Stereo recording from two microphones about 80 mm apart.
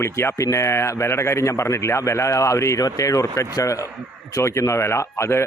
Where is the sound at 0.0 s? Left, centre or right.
Left.